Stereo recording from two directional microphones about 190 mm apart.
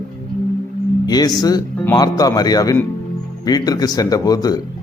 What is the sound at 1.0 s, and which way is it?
Speech, 20° left (ahead or behind).